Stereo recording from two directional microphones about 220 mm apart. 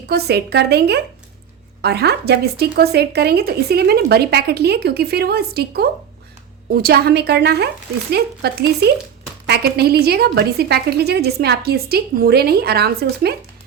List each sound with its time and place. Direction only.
0.1 s speech: 50° right (ahead or behind)